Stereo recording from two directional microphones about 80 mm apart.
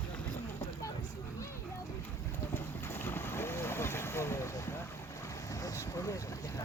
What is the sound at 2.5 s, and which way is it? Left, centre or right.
Boat, left.